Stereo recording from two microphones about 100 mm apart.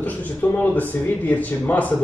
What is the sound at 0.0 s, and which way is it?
A man's voice, 15° left (ahead or behind).